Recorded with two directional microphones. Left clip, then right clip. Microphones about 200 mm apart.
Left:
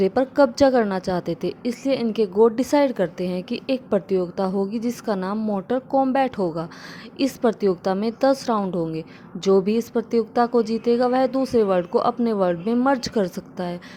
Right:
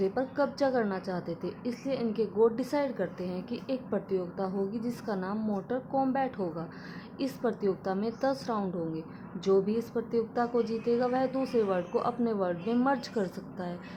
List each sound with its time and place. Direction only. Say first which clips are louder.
0.0 s a woman's voice: left 11 dB; 30° left (ahead or behind)